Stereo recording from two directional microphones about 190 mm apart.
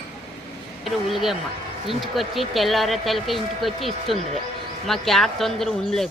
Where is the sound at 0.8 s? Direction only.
Centre (ahead or behind).